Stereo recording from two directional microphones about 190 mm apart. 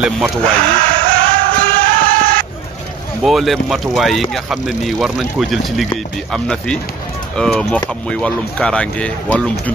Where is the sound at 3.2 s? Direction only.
Centre (ahead or behind).